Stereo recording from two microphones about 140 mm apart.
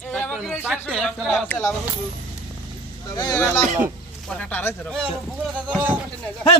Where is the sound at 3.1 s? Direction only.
25° left (ahead or behind).